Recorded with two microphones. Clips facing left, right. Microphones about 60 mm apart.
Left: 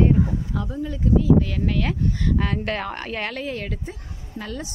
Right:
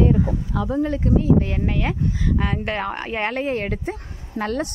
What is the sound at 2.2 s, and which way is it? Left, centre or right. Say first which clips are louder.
Speech: right 1 dB; centre.